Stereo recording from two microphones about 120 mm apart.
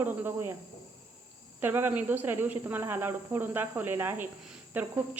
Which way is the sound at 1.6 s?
15° right (ahead or behind).